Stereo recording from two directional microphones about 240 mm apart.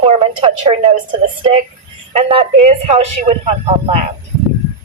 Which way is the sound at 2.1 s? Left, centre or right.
Right.